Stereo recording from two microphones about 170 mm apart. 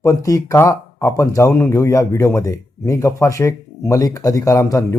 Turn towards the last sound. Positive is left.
turn(degrees=20)  # may be behind; listen again after turning